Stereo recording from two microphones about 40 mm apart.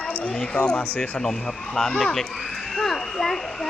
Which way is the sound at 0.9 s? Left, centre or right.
Left.